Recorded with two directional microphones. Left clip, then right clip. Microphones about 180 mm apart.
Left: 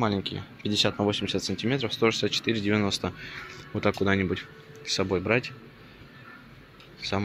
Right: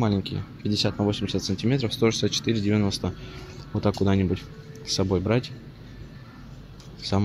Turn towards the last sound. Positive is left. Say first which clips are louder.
# right 2 dB
turn(degrees=-15)  # may be behind; listen again after turning